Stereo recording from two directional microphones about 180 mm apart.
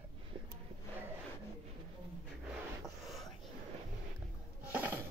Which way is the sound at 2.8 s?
Centre (ahead or behind).